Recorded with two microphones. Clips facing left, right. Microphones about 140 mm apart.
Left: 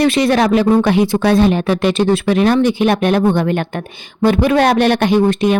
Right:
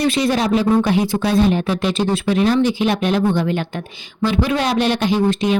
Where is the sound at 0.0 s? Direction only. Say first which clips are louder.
Left 5 dB; 70° left (ahead or behind).